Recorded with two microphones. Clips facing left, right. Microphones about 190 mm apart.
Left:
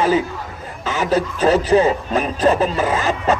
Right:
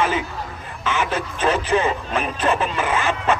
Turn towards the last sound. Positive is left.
turn(degrees=40)  # may be behind; listen again after turning